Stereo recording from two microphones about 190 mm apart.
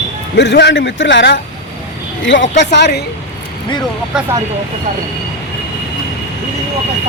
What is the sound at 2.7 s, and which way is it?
Speech, 60° left (ahead or behind).